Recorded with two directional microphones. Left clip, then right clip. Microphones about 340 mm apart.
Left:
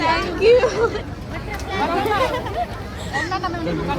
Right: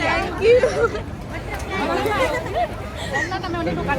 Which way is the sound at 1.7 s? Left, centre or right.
Left.